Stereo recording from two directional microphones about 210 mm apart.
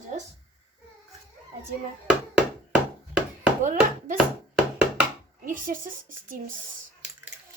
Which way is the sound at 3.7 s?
40° right (ahead or behind).